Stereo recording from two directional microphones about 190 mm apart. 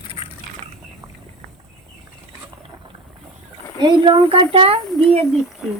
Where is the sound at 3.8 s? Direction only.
25° right (ahead or behind).